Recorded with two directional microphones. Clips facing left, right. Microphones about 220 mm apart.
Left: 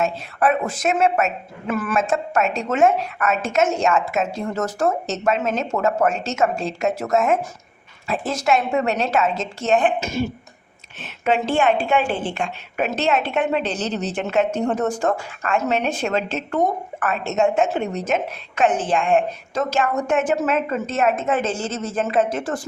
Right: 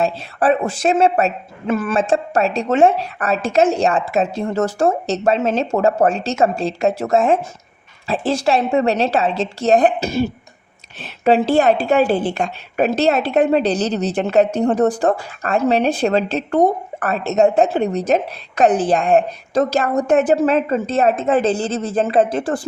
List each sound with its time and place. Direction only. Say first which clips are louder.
0.0 s a woman's voice: right 3 dB; 30° right (ahead or behind)